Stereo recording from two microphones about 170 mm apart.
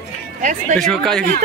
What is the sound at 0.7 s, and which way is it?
Speech, centre (ahead or behind).